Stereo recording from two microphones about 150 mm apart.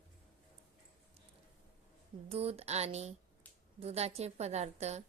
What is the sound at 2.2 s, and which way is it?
A woman's voice, 40° right (ahead or behind).